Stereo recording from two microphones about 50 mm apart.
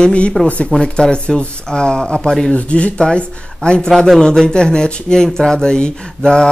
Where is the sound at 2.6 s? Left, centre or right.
Left.